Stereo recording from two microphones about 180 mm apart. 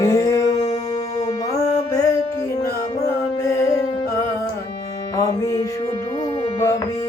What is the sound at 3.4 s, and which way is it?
Music, 20° left (ahead or behind).